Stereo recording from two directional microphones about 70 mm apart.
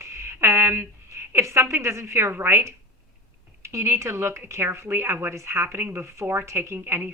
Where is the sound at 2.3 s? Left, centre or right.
Right.